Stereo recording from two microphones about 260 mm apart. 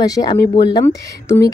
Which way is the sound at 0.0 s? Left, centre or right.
Centre.